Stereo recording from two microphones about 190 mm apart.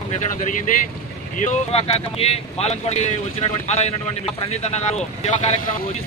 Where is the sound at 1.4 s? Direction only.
35° left (ahead or behind).